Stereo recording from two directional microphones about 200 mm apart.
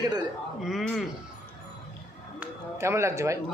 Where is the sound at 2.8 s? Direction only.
15° right (ahead or behind).